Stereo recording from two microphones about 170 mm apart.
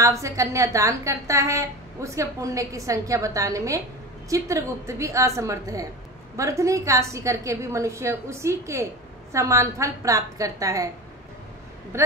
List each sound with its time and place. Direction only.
0.0 s a woman's voice: 20° right (ahead or behind)